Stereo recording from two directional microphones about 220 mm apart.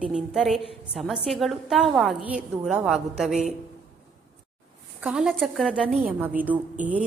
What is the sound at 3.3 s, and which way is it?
Speech, 30° right (ahead or behind).